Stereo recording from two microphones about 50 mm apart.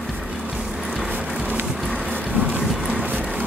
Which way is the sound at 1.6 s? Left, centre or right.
Centre.